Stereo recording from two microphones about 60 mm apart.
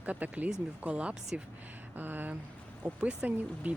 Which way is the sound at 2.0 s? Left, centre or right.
Right.